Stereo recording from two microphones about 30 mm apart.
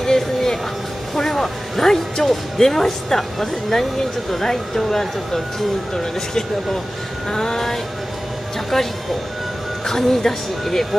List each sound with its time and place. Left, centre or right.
0.0 s music: centre
1.8 s a woman's voice: centre
9.8 s a woman's voice: centre